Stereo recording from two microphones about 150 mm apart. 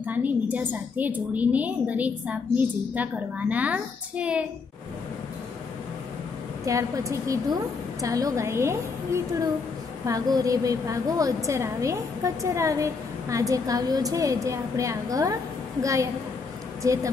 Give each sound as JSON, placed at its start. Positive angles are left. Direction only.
{"t": 0.0, "sound": "a woman's voice", "side_deg": -10}
{"t": 6.6, "sound": "a woman's voice", "side_deg": -20}